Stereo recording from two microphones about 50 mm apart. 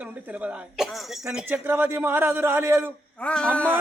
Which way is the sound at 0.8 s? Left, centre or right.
Centre.